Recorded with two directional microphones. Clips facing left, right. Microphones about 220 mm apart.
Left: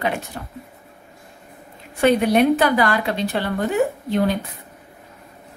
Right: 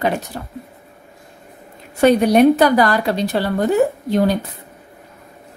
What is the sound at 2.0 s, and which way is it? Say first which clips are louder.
A woman's voice: right 4 dB; 40° right (ahead or behind).